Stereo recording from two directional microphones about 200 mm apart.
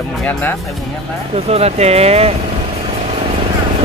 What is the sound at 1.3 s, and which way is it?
Speech, 30° right (ahead or behind).